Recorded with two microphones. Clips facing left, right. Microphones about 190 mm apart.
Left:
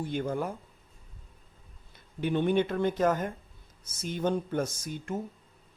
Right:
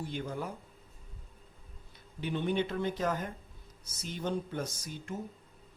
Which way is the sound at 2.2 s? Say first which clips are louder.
Left 6 dB; 55° left (ahead or behind).